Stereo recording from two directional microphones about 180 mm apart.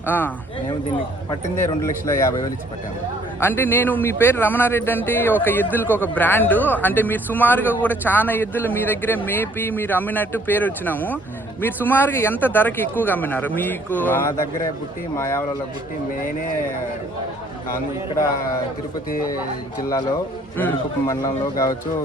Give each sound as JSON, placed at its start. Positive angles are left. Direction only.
{"t": 0.0, "sound": "speech", "side_deg": 10}
{"t": 1.5, "sound": "speech", "side_deg": 15}
{"t": 20.6, "sound": "speech", "side_deg": 15}